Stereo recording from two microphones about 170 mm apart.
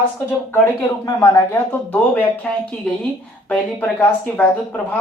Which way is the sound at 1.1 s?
20° left (ahead or behind).